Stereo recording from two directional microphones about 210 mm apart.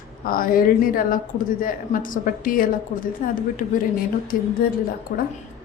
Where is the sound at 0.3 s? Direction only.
45° left (ahead or behind).